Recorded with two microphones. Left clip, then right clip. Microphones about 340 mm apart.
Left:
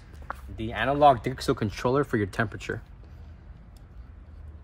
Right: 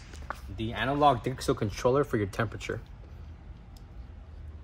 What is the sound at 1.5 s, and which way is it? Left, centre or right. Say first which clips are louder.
Speech: even; left.